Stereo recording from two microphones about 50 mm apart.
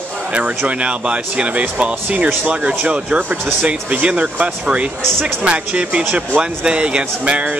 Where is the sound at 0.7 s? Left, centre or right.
Right.